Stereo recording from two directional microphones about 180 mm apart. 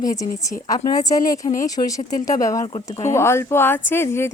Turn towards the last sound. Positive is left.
turn(degrees=15)  # may be behind; listen again after turning